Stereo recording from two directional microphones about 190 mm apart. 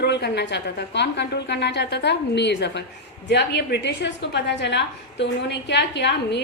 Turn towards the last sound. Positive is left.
turn(degrees=65)  # may be behind; listen again after turning